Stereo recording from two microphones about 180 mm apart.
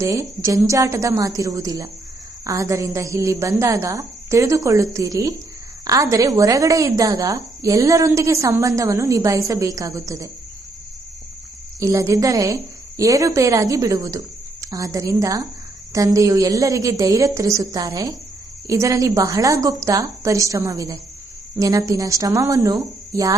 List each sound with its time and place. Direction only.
0.0 s a woman's voice: 15° right (ahead or behind)
11.8 s a woman's voice: 15° right (ahead or behind)